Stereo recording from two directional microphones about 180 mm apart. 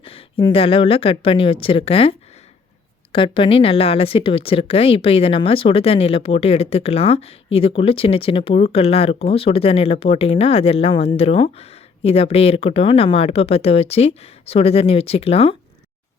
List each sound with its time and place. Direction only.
0.0 s speech: 30° left (ahead or behind)